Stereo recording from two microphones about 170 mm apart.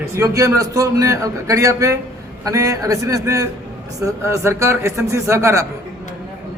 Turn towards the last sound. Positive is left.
turn(degrees=-15)  # may be behind; listen again after turning